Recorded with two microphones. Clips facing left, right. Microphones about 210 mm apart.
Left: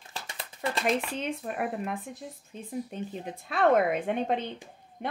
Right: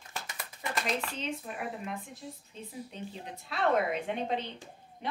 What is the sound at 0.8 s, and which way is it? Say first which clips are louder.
A woman's voice: left 7 dB; 55° left (ahead or behind).